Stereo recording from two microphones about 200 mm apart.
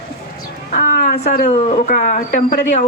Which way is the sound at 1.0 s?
35° left (ahead or behind).